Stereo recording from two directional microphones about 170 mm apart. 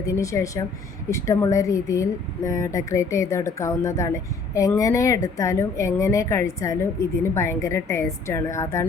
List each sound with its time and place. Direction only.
0.0 s a woman's voice: 20° left (ahead or behind)